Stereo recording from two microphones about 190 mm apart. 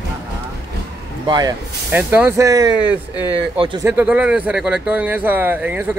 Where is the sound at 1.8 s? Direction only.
10° right (ahead or behind).